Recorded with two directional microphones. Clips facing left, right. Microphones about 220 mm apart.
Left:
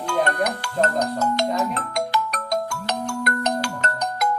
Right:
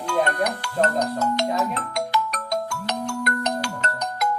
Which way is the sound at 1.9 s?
50° left (ahead or behind).